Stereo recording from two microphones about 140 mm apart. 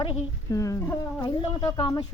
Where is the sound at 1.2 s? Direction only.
35° left (ahead or behind).